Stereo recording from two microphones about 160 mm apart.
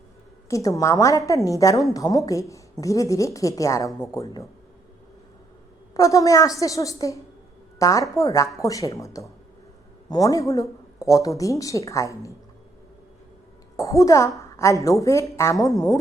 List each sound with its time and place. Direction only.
0.5 s speech: 20° left (ahead or behind)
3.8 s speech: 5° left (ahead or behind)
4.1 s speech: 20° left (ahead or behind)
5.9 s speech: 20° left (ahead or behind)
13.7 s speech: 20° left (ahead or behind)